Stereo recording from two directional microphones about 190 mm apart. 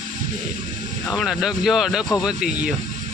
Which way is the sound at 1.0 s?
Centre (ahead or behind).